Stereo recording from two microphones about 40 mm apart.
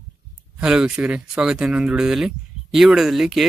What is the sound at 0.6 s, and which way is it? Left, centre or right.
Speech, right.